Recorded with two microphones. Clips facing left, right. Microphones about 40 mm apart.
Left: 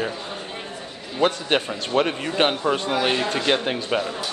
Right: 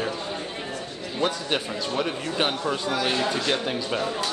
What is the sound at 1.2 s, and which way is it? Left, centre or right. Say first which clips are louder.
Speech: left 5 dB; left.